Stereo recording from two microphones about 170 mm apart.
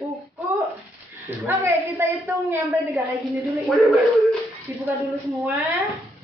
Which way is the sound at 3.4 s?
Centre (ahead or behind).